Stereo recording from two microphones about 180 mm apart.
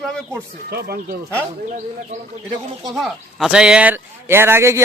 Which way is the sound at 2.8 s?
Centre (ahead or behind).